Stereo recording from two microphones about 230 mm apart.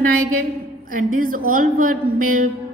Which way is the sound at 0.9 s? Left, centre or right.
Right.